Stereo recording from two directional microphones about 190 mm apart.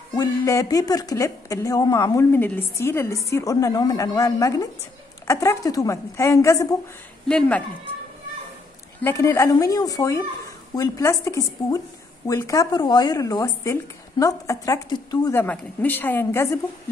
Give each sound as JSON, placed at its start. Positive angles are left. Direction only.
{"t": 0.1, "sound": "a woman's voice", "side_deg": 15}
{"t": 7.2, "sound": "speech", "side_deg": 5}
{"t": 9.0, "sound": "a woman's voice", "side_deg": 15}
{"t": 15.4, "sound": "a woman's voice", "side_deg": 10}